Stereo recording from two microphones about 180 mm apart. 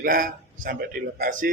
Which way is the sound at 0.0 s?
50° right (ahead or behind).